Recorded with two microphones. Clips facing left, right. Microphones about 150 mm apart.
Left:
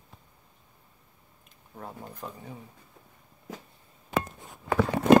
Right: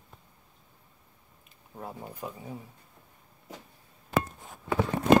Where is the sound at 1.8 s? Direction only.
10° right (ahead or behind).